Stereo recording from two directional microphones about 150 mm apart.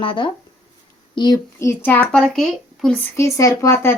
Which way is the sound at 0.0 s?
35° left (ahead or behind).